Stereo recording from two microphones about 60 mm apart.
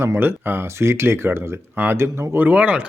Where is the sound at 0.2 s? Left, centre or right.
Right.